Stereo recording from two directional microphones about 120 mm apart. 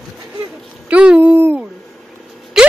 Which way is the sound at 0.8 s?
10° right (ahead or behind).